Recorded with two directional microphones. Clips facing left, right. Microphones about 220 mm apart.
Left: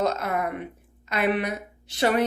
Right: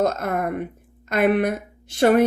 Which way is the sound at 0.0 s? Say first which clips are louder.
Right 3 dB; 50° right (ahead or behind).